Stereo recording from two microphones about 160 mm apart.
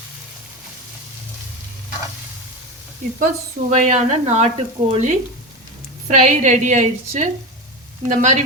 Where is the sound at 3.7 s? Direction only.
50° right (ahead or behind).